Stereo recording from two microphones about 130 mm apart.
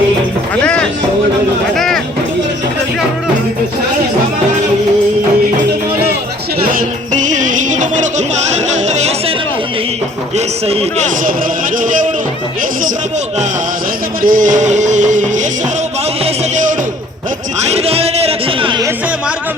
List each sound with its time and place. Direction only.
0.6 s music: 10° left (ahead or behind)
6.7 s music: 70° right (ahead or behind)
10.3 s a sound: 50° right (ahead or behind)
11.8 s music: 90° right
14.2 s music: 90° right; by 15.4 s 70° right (ahead or behind)
17.7 s a sound: 50° right (ahead or behind)